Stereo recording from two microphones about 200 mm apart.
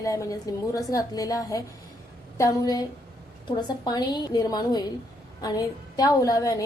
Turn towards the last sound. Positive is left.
turn(degrees=15)  # may be behind; listen again after turning